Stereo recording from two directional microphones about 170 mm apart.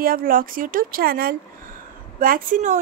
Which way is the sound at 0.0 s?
55° right (ahead or behind).